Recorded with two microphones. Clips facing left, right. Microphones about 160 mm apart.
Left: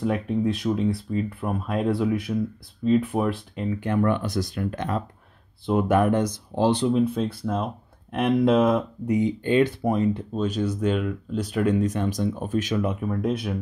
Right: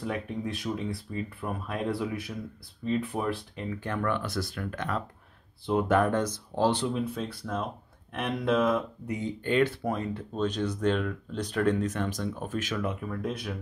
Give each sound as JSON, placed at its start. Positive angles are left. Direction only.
{"t": 0.0, "sound": "speech", "side_deg": 20}
{"t": 5.7, "sound": "speech", "side_deg": 10}